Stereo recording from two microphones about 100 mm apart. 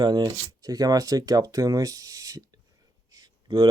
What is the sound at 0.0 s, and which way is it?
Speech, 45° right (ahead or behind).